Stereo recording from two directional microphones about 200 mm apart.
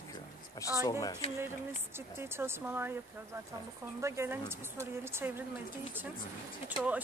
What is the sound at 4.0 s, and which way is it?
A woman's voice, 15° right (ahead or behind).